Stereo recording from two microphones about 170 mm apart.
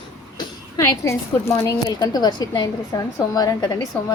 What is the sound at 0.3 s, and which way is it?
A woman's voice, 15° left (ahead or behind).